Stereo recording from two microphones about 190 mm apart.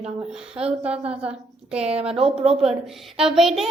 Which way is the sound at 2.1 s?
30° right (ahead or behind).